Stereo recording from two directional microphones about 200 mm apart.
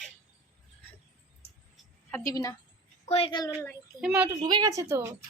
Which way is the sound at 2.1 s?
15° left (ahead or behind).